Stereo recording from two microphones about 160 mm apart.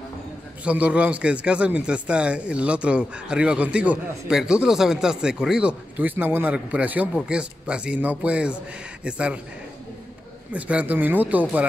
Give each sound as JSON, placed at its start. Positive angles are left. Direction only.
{"t": 0.7, "sound": "a man's voice", "side_deg": -10}
{"t": 10.5, "sound": "a man's voice", "side_deg": -10}